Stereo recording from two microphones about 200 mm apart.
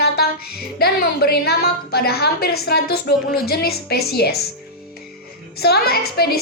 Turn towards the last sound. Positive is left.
turn(degrees=50)  # may be behind; listen again after turning